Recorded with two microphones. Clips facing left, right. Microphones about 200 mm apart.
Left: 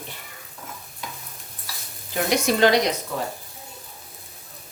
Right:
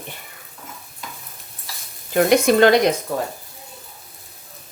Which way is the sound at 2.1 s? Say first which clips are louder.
Right 7 dB; 55° right (ahead or behind).